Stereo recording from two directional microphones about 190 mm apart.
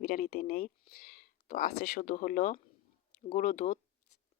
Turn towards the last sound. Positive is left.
turn(degrees=40)  # may be behind; listen again after turning